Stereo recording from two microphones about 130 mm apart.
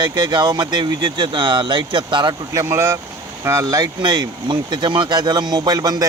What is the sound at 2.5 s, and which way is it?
Speech, 20° right (ahead or behind).